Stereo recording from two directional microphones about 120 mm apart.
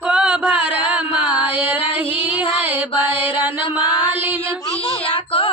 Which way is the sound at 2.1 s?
15° right (ahead or behind).